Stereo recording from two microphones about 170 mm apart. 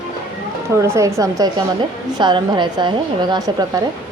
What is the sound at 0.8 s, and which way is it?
A woman's voice, 15° right (ahead or behind).